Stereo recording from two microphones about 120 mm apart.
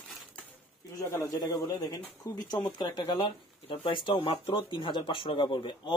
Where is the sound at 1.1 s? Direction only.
25° left (ahead or behind); by 5.9 s 40° left (ahead or behind).